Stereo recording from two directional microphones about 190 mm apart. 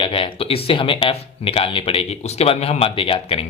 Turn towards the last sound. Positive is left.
turn(degrees=30)  # may be behind; listen again after turning